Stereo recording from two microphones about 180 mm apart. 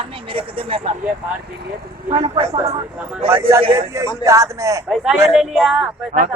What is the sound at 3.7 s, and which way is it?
A man's voice, 15° right (ahead or behind).